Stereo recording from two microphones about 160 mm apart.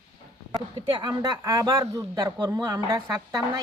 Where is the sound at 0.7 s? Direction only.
30° right (ahead or behind).